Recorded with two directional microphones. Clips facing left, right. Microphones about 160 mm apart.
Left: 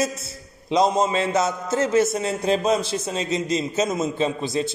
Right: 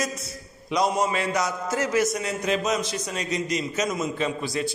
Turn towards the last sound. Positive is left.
turn(degrees=25)  # may be behind; listen again after turning